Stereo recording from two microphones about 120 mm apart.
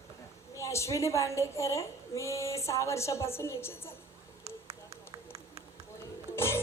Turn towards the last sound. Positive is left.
turn(degrees=20)  # may be behind; listen again after turning